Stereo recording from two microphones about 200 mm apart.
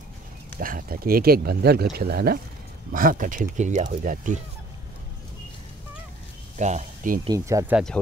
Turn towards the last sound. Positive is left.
turn(degrees=-15)  # may be behind; listen again after turning